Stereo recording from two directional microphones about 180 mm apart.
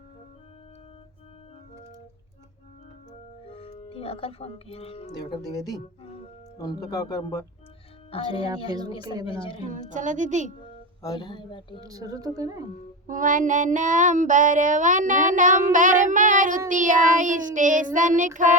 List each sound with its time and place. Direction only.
3.5 s speech: 30° left (ahead or behind)
5.1 s speech: 20° left (ahead or behind)
8.1 s speech: 30° left (ahead or behind)
9.9 s child singing: 45° right (ahead or behind)
11.0 s speech: 20° left (ahead or behind)
11.8 s speech: 20° right (ahead or behind)
13.1 s child singing: 45° right (ahead or behind)